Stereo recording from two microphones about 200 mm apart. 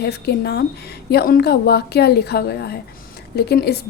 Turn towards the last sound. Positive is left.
turn(degrees=55)  # may be behind; listen again after turning